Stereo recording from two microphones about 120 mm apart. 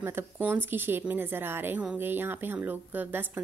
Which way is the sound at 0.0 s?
20° right (ahead or behind).